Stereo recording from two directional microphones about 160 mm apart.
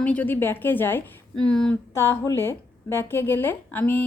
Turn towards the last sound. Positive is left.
turn(degrees=10)  # may be behind; listen again after turning